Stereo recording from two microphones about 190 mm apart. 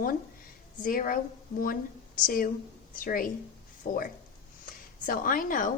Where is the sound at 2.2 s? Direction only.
50° left (ahead or behind).